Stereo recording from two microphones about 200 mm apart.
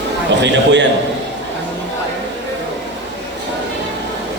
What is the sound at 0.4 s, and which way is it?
Speech, 65° right (ahead or behind).